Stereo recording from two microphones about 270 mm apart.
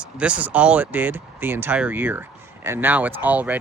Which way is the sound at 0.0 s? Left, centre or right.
Centre.